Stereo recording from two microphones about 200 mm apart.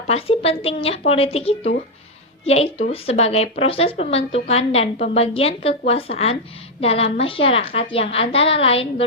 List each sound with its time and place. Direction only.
0.1 s a woman's voice: 30° left (ahead or behind)